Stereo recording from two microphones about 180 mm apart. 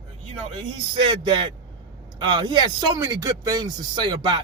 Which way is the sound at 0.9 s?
25° right (ahead or behind).